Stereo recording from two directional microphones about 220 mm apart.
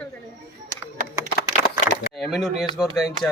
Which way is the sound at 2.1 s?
Centre (ahead or behind).